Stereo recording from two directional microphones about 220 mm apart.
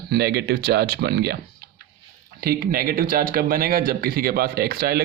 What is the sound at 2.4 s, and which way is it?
Speech, 40° right (ahead or behind).